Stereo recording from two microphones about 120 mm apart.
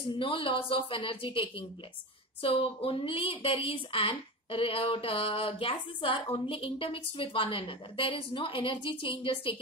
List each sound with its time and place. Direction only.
0.1 s a woman's voice: 45° left (ahead or behind)